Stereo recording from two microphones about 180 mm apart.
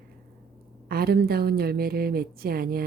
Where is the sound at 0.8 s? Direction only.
60° right (ahead or behind).